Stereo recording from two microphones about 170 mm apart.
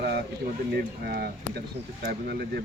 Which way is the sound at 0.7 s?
65° right (ahead or behind).